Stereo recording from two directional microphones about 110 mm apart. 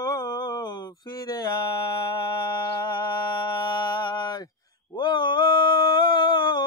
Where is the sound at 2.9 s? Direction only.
40° left (ahead or behind).